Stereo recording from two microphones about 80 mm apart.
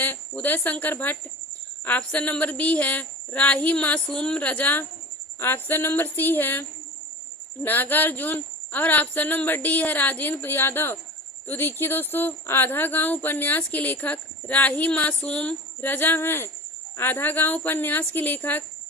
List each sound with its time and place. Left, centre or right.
0.0 s speech: left